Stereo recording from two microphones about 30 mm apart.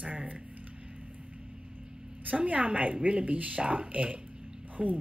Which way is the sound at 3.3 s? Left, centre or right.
Right.